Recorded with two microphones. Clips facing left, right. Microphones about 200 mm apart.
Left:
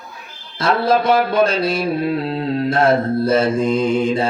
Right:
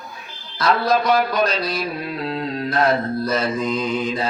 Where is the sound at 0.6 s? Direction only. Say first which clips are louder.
Left 2 dB; 25° left (ahead or behind).